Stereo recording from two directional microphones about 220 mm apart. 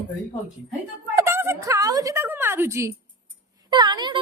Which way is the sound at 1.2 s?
10° right (ahead or behind).